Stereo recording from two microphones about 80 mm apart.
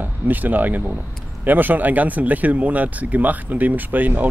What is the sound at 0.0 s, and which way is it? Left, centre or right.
Speech, right.